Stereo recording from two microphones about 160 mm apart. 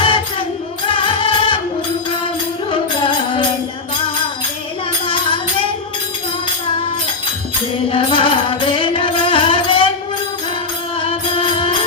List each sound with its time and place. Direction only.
0.0 s music: 30° left (ahead or behind)
5.0 s music: 30° left (ahead or behind)
7.9 s music: 35° left (ahead or behind)